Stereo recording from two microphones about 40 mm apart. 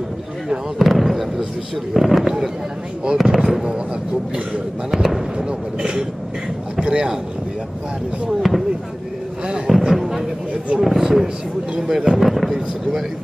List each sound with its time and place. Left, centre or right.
0.7 s fireworks: centre
2.0 s speech: centre
4.9 s speech: centre
5.4 s speech: right
8.4 s speech: centre
9.7 s a sound: centre
10.8 s speech: centre